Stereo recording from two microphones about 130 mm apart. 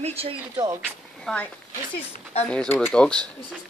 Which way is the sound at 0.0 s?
50° right (ahead or behind).